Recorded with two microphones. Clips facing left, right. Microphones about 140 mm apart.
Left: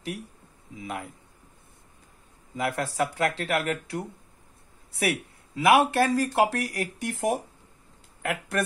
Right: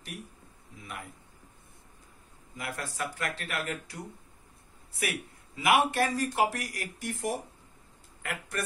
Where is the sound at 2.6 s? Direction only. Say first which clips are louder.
Left 9 dB; 75° left (ahead or behind).